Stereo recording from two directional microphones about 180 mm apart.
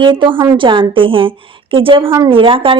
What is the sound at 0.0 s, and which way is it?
A woman's voice, 30° right (ahead or behind).